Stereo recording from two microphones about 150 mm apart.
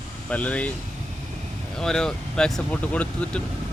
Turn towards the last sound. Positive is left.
turn(degrees=10)  # may be behind; listen again after turning